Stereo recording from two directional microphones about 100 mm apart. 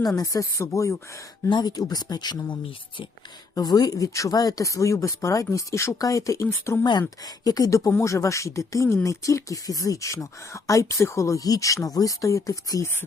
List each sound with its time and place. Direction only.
0.2 s speech: 30° left (ahead or behind)
1.5 s speech: 45° left (ahead or behind); by 6.7 s 30° left (ahead or behind)
7.3 s speech: 40° left (ahead or behind)